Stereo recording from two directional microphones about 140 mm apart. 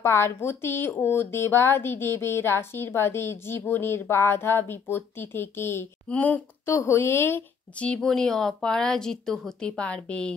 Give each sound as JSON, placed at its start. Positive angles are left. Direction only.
{"t": 0.0, "sound": "a woman's voice", "side_deg": 20}